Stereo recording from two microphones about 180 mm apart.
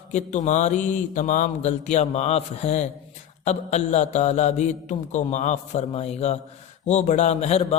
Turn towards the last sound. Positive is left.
turn(degrees=35)  # may be behind; listen again after turning